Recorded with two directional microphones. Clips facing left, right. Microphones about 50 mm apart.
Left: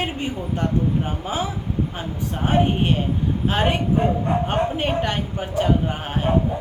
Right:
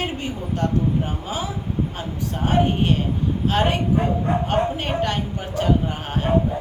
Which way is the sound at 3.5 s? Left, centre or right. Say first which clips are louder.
Even; centre.